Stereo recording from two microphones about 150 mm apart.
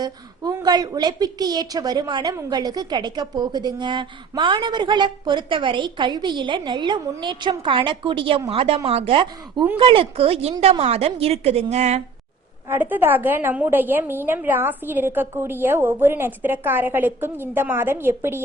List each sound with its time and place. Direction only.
0.0 s a woman's voice: 25° right (ahead or behind); by 12.0 s 50° right (ahead or behind)
12.6 s a woman's voice: 15° right (ahead or behind)